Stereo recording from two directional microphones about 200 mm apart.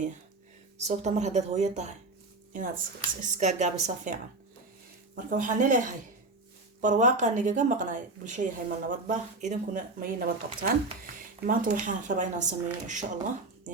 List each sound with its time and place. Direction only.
0.8 s a woman's voice: 35° right (ahead or behind)
3.0 s a woman's voice: 35° right (ahead or behind)